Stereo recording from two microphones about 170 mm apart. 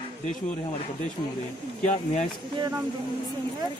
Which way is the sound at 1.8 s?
45° left (ahead or behind).